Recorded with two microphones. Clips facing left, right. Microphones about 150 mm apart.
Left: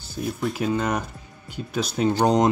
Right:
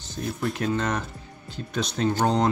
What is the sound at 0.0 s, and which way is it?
Speech, 10° left (ahead or behind).